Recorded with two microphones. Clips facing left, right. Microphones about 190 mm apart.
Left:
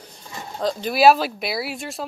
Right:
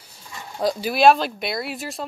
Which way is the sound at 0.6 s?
10° right (ahead or behind).